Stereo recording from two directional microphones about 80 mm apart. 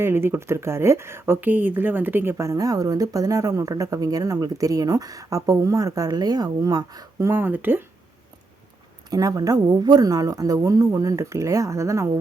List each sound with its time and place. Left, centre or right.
0.0 s speech: right
2.4 s speech: right
7.3 s speech: right
9.0 s speech: right